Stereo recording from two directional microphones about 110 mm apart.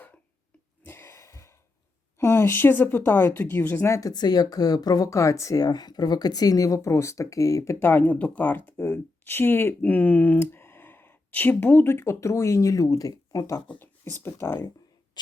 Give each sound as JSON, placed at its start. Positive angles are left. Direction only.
{"t": 0.9, "sound": "a sound", "side_deg": 20}
{"t": 2.1, "sound": "speech", "side_deg": 20}
{"t": 4.1, "sound": "speech", "side_deg": 40}
{"t": 7.9, "sound": "speech", "side_deg": 15}
{"t": 13.7, "sound": "speech", "side_deg": 20}